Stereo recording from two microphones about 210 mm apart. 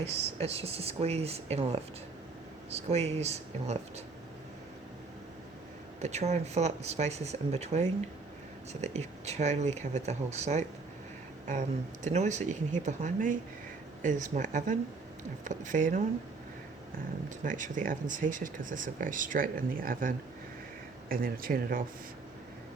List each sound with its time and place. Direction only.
0.0 s speech: 30° right (ahead or behind)
6.0 s speech: 30° right (ahead or behind)
12.0 s speech: 35° right (ahead or behind)
17.2 s speech: 40° right (ahead or behind)